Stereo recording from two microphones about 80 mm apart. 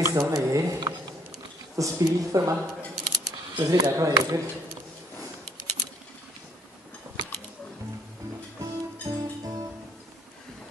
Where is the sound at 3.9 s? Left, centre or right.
Right.